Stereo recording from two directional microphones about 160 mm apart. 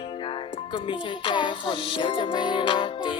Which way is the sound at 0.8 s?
30° left (ahead or behind).